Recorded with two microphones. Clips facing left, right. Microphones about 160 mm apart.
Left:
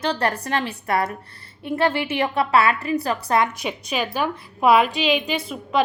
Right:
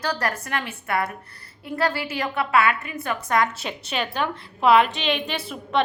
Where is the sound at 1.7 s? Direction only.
25° left (ahead or behind).